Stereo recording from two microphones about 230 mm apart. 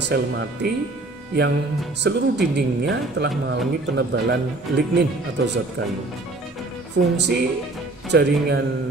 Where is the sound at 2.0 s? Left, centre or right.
Right.